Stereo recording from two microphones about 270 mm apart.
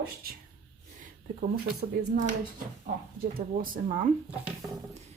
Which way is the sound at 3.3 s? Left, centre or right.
Right.